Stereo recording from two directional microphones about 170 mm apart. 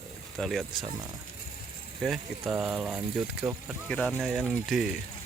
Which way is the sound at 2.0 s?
Centre (ahead or behind).